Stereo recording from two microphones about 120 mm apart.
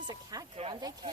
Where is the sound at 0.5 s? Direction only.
55° right (ahead or behind).